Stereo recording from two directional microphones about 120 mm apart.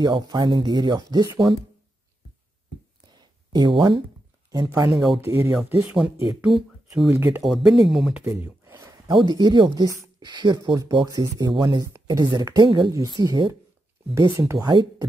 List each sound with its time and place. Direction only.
0.0 s speech: 40° right (ahead or behind)
3.1 s a sound: 35° right (ahead or behind)
4.5 s speech: 35° right (ahead or behind)
5.2 s speech: 20° right (ahead or behind)
6.4 s speech: 5° right (ahead or behind)
7.1 s speech: 20° right (ahead or behind)
7.4 s speech: centre (ahead or behind)
8.3 s a sound: 15° right (ahead or behind)
8.9 s a sound: 35° right (ahead or behind)
9.3 s speech: 35° right (ahead or behind)
9.8 s speech: 25° right (ahead or behind)
10.3 s speech: 40° right (ahead or behind)
11.8 s speech: 30° right (ahead or behind)
14.6 s speech: 35° right (ahead or behind)